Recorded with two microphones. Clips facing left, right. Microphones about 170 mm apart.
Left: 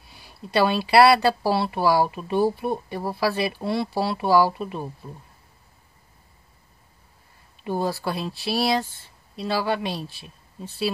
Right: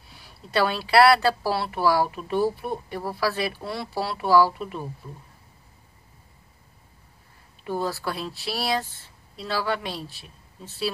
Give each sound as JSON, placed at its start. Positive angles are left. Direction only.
{"t": 0.6, "sound": "speech", "side_deg": 20}
{"t": 7.6, "sound": "speech", "side_deg": 15}